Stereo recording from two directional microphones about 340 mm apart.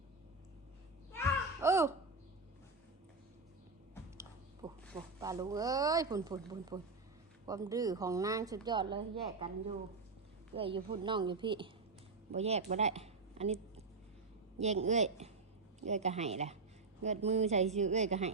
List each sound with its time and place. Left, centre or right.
1.6 s babbling: centre
4.6 s a sound: centre
5.2 s a woman's voice: centre